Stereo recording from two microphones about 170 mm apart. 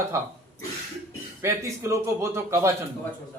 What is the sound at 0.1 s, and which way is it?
Speech, 15° right (ahead or behind).